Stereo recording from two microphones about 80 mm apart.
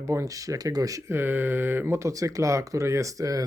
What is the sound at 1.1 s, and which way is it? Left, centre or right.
Speech, right.